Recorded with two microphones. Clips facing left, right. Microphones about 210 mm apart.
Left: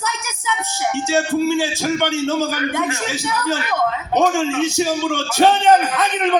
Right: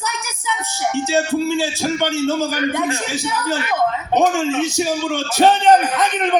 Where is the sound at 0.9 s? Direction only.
15° right (ahead or behind).